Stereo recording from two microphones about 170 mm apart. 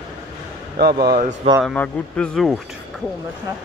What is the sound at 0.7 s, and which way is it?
Speech, 60° right (ahead or behind).